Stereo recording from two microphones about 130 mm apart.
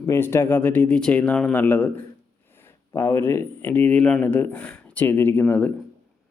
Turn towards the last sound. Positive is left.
turn(degrees=15)  # may be behind; listen again after turning